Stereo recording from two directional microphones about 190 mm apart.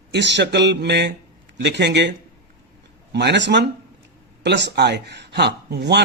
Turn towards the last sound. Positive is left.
turn(degrees=-60)  # may be behind; listen again after turning